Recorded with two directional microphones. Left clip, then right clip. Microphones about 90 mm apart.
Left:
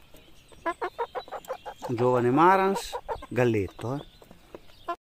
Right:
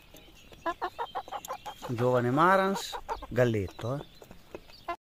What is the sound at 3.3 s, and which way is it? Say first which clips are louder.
Speech: left 2 dB; 70° left (ahead or behind).